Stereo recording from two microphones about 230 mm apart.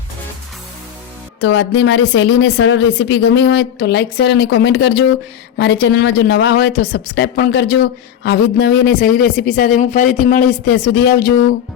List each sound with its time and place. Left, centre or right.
1.4 s speech: left